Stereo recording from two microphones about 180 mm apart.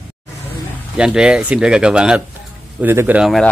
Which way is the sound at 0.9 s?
5° right (ahead or behind).